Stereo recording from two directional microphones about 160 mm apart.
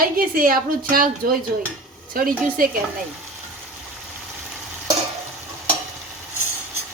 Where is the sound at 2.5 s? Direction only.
65° right (ahead or behind).